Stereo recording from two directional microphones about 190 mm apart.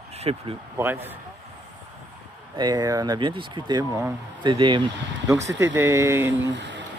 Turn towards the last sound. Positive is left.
turn(degrees=-15)  # may be behind; listen again after turning